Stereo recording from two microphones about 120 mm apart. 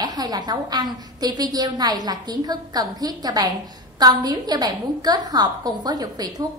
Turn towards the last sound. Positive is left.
turn(degrees=-35)  # may be behind; listen again after turning